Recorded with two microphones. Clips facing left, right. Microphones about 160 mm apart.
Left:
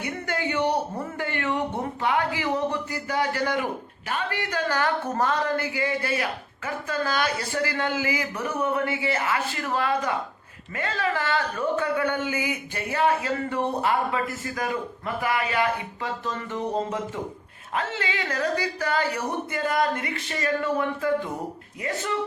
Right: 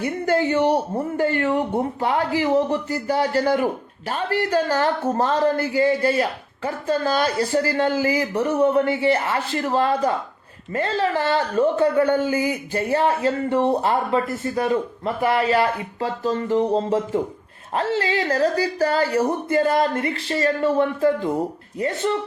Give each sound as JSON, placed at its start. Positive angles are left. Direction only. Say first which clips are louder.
{"t": 0.0, "sound": "a man's voice", "louder": "right 8 dB", "side_deg": -30}